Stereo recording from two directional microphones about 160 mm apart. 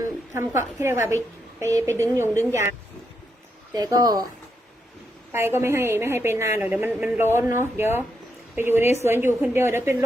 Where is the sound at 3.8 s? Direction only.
20° right (ahead or behind).